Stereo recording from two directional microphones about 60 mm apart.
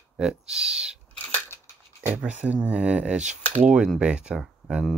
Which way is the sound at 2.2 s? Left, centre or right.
Right.